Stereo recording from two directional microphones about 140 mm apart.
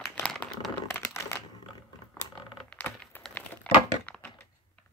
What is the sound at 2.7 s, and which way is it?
Wood, 10° left (ahead or behind).